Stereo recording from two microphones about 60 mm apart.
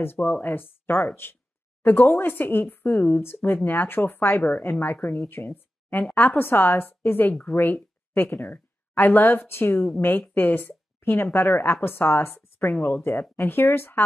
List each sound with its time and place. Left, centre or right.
0.0 s a woman's voice: left
3.6 s a woman's voice: left
12.6 s a woman's voice: left